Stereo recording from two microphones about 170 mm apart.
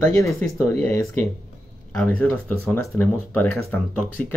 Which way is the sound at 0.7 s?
15° left (ahead or behind).